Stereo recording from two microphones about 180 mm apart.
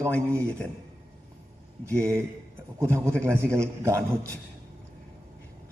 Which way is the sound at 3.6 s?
15° right (ahead or behind).